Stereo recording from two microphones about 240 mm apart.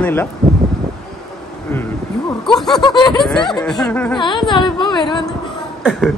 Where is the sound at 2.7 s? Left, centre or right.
Centre.